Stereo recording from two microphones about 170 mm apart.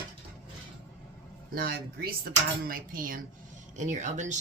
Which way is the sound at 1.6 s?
60° right (ahead or behind).